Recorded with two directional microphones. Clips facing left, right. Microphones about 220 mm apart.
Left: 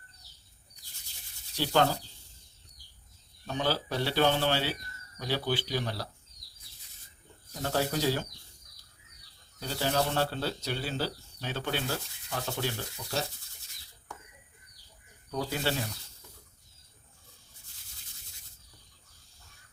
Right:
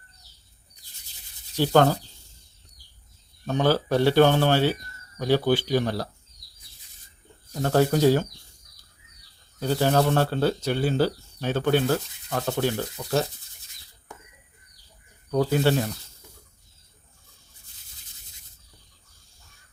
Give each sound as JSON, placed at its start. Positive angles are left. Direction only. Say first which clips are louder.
{"t": 1.5, "sound": "speech", "louder": "right 7 dB", "side_deg": -50}
{"t": 3.4, "sound": "speech", "louder": "right 9 dB", "side_deg": -50}
{"t": 7.6, "sound": "speech", "louder": "right 9 dB", "side_deg": -50}
{"t": 9.6, "sound": "speech", "louder": "right 8 dB", "side_deg": -55}
{"t": 15.3, "sound": "speech", "louder": "right 10 dB", "side_deg": -55}